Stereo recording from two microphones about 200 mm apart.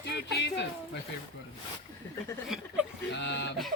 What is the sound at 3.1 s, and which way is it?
Speech, 60° left (ahead or behind).